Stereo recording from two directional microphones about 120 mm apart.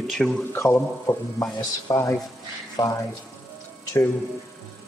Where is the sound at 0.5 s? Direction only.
25° left (ahead or behind).